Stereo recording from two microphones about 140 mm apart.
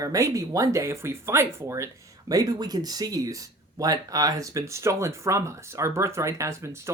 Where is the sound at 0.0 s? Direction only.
25° right (ahead or behind).